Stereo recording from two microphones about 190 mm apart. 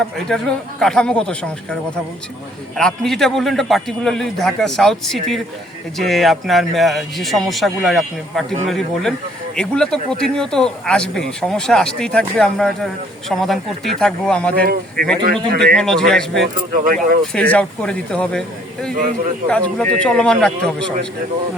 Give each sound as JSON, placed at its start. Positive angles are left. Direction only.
{"t": 0.3, "sound": "speech", "side_deg": 0}
{"t": 2.7, "sound": "speech", "side_deg": 0}
{"t": 14.6, "sound": "speech", "side_deg": -50}
{"t": 15.5, "sound": "speech", "side_deg": 0}
{"t": 16.7, "sound": "speech", "side_deg": -45}
{"t": 17.3, "sound": "speech", "side_deg": 5}